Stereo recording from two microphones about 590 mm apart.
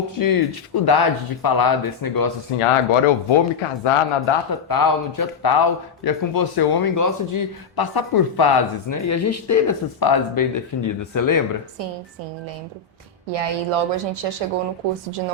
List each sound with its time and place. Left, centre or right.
0.2 s a man's voice: left
2.6 s speech: left
4.7 s a man's voice: left
13.3 s a woman's voice: right